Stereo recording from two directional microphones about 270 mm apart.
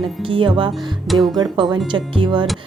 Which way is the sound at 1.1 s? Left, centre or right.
Centre.